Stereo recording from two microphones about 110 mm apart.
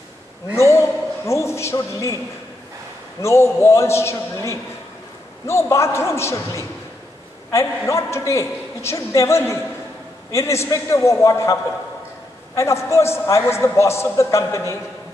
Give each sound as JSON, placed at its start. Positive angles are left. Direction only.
{"t": 0.6, "sound": "a sound", "side_deg": 25}
{"t": 3.2, "sound": "a man's voice", "side_deg": 25}
{"t": 12.5, "sound": "a man's voice", "side_deg": 25}